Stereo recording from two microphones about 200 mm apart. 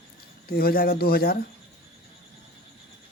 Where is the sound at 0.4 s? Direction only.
50° left (ahead or behind).